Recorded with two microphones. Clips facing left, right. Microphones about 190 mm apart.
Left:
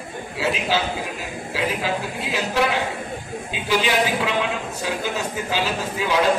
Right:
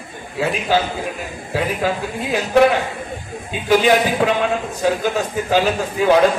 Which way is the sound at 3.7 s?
50° right (ahead or behind).